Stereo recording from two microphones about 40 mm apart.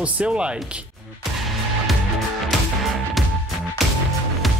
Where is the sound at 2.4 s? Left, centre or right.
Centre.